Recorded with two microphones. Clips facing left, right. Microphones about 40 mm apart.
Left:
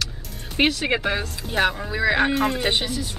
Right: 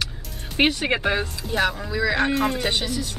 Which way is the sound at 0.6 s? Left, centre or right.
Centre.